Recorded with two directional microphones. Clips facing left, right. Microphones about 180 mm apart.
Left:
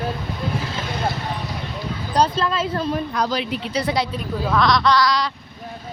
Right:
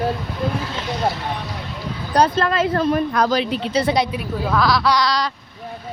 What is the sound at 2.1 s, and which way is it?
Speech, 65° right (ahead or behind).